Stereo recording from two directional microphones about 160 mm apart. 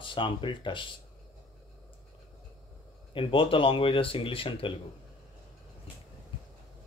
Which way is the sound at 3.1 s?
30° left (ahead or behind).